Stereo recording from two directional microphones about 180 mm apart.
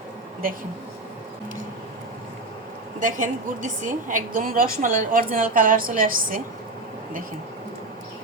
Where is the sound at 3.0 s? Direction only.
45° right (ahead or behind).